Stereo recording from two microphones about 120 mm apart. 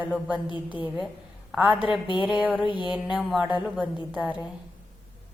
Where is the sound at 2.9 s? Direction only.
5° right (ahead or behind).